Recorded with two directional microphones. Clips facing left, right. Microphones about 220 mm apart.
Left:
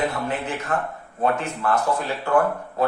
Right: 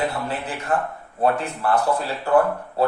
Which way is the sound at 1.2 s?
35° right (ahead or behind).